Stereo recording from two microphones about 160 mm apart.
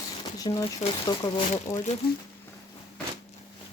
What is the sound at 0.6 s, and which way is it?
Speech, 35° left (ahead or behind).